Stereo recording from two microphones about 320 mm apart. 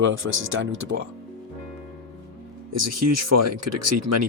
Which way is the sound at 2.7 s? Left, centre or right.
Right.